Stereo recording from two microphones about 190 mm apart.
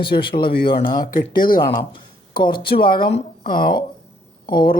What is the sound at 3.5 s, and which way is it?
Speech, 50° left (ahead or behind).